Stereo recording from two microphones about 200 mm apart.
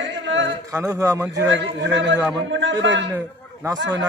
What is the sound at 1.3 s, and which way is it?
Speech, 65° right (ahead or behind).